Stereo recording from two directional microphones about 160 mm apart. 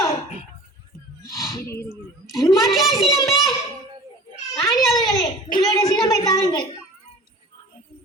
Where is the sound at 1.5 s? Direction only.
20° left (ahead or behind).